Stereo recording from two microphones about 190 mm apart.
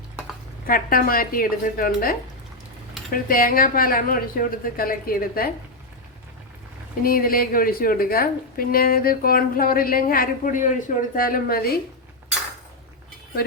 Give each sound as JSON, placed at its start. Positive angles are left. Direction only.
{"t": 0.7, "sound": "a woman's voice", "side_deg": 50}
{"t": 7.0, "sound": "a woman's voice", "side_deg": 50}